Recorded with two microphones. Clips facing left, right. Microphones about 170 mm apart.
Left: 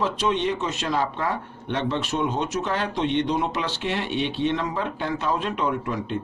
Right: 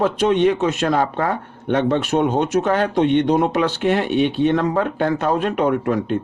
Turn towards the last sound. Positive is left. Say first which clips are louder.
# right 8 dB
turn(degrees=-55)  # may be behind; listen again after turning